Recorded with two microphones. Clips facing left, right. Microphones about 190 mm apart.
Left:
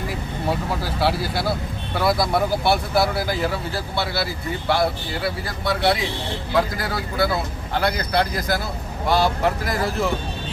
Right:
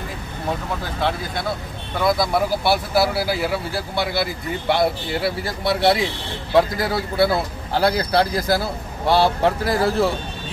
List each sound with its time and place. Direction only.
0.8 s a man's voice: 5° left (ahead or behind); by 10.0 s 30° right (ahead or behind)